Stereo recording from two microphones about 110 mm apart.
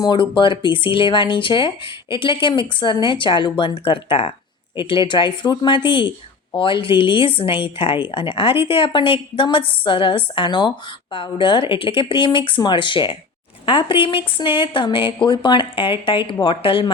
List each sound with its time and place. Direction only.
0.0 s a woman's voice: 45° left (ahead or behind)